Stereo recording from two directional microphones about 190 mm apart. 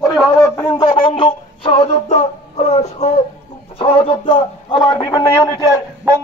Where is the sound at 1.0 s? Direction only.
30° left (ahead or behind).